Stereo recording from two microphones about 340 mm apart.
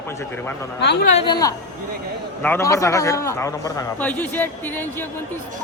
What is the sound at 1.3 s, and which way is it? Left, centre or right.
A man's voice, centre.